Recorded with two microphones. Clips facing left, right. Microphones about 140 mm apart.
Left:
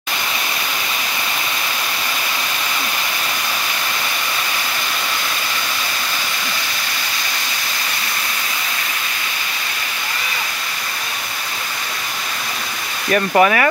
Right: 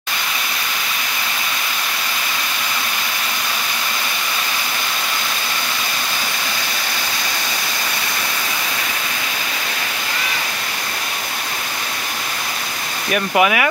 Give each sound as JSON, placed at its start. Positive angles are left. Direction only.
{"t": 13.4, "sound": "speech", "side_deg": -10}